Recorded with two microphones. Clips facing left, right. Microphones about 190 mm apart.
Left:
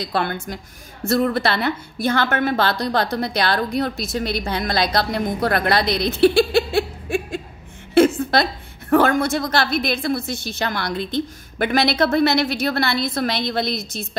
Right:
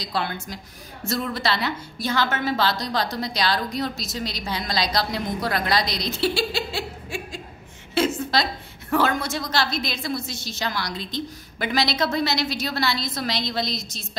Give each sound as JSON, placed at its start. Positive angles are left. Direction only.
{"t": 0.0, "sound": "a woman's voice", "side_deg": 55}